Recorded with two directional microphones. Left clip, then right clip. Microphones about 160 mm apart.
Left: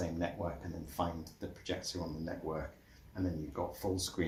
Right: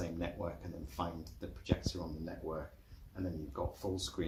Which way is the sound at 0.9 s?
45° left (ahead or behind).